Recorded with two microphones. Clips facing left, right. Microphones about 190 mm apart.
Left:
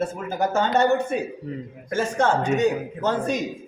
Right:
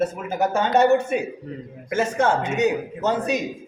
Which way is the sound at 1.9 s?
10° right (ahead or behind).